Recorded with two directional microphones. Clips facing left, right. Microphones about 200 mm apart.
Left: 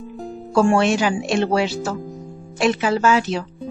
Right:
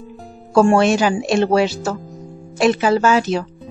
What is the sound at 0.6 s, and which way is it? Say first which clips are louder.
Speech: right 3 dB; 40° right (ahead or behind).